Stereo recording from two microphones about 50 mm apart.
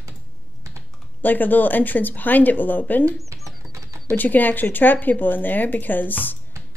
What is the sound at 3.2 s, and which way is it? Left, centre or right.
Bird, right.